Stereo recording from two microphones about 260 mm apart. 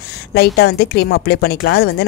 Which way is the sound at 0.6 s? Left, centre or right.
Left.